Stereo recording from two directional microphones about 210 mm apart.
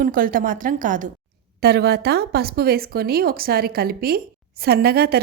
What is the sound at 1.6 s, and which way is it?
A woman's voice, 50° right (ahead or behind).